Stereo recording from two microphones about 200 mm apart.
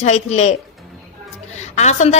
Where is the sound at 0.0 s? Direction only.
35° left (ahead or behind).